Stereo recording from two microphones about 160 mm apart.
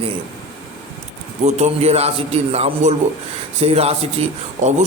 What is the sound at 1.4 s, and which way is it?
A man's voice, 45° right (ahead or behind).